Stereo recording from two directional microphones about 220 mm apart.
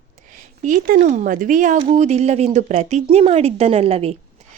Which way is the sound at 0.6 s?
35° right (ahead or behind).